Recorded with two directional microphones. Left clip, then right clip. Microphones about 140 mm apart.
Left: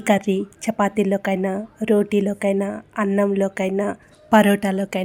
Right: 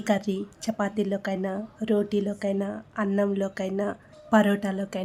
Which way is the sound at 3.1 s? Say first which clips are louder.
Left 6 dB; 20° left (ahead or behind).